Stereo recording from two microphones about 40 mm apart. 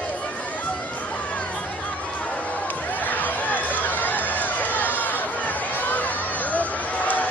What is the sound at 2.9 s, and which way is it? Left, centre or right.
Run, left.